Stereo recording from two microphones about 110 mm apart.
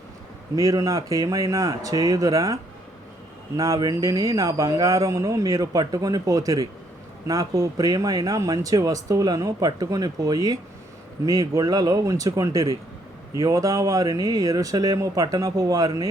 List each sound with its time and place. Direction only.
0.5 s speech: 30° right (ahead or behind)
3.6 s speech: 35° right (ahead or behind)